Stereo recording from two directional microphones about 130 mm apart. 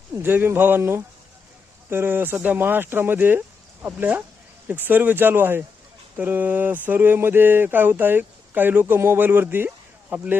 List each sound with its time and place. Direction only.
0.1 s speech: 15° right (ahead or behind)